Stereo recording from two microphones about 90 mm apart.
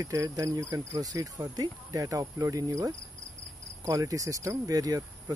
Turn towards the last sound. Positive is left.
turn(degrees=-40)  # may be behind; listen again after turning